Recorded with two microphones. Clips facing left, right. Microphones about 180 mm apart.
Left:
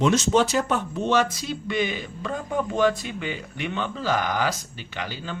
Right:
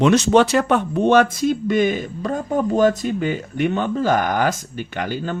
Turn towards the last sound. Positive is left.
turn(degrees=-50)  # may be behind; listen again after turning